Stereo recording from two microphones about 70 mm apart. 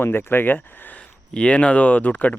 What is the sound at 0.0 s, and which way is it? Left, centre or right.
Speech, left.